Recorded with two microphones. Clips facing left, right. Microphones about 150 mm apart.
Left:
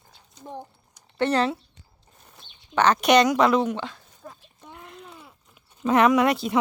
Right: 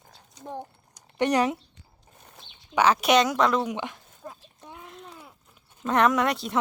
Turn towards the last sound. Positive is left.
turn(degrees=0)  # may be behind; listen again after turning